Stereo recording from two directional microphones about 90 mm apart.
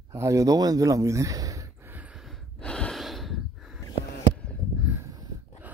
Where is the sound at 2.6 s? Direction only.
10° left (ahead or behind).